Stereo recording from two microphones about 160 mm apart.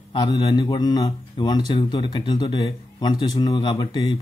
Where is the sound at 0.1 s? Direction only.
25° left (ahead or behind).